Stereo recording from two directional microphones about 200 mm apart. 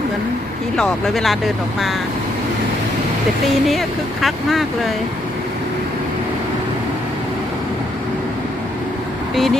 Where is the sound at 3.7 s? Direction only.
Centre (ahead or behind).